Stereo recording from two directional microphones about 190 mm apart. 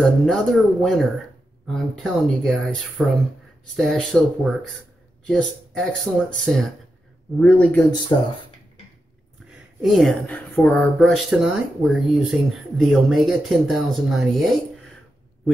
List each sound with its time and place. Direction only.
0.0 s speech: centre (ahead or behind)
8.1 s speech: 25° left (ahead or behind)
9.8 s speech: centre (ahead or behind)